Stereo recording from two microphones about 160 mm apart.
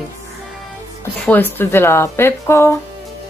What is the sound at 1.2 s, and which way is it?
Speech, 10° left (ahead or behind).